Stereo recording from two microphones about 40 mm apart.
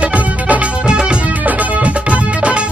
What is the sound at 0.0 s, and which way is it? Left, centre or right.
Music, right.